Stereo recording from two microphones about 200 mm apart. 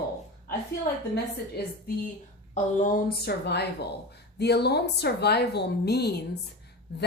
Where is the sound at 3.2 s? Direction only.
55° left (ahead or behind).